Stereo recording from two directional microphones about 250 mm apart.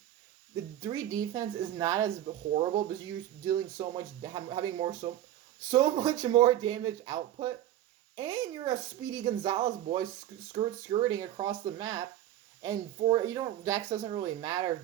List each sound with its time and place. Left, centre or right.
0.5 s speech: centre
2.2 s speech: right
9.6 s speech: right
10.5 s speech: centre